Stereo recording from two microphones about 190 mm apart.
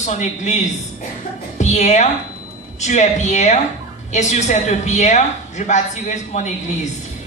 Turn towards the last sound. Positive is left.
turn(degrees=40)  # may be behind; listen again after turning